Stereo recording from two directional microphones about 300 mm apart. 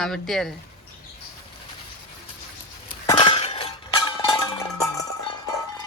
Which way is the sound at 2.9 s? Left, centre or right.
Centre.